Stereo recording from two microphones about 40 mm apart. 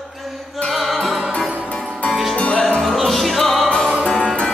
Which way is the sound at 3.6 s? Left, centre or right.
Centre.